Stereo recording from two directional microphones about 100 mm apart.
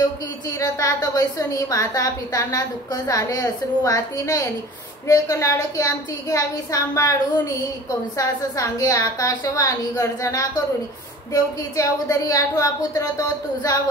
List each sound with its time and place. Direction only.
0.6 s a woman's voice: 35° left (ahead or behind)
8.2 s a woman's voice: 35° left (ahead or behind)